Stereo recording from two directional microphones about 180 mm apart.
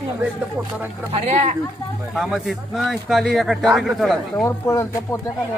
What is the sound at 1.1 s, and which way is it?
Speech, 40° right (ahead or behind).